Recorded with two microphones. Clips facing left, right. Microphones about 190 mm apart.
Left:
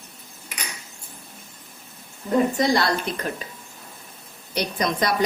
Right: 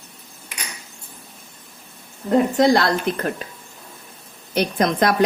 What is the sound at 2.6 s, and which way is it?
Speech, 55° right (ahead or behind).